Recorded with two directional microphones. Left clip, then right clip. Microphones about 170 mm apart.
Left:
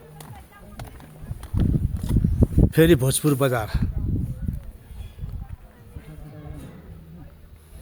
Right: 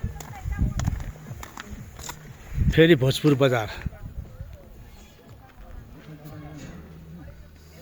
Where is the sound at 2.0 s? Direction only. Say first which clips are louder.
Left 5 dB; 80° right.